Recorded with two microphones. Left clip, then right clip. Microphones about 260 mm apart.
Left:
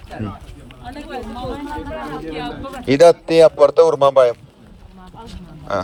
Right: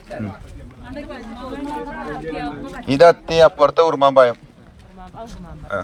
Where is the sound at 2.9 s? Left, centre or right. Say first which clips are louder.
Left 1 dB; left.